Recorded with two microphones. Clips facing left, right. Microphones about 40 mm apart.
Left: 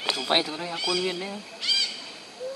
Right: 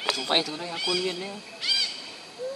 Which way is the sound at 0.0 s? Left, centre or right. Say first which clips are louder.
Left 1 dB; centre.